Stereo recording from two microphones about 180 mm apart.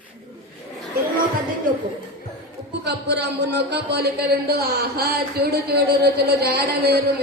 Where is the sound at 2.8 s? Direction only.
70° right (ahead or behind).